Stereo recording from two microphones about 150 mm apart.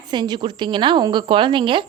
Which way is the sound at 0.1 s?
30° right (ahead or behind).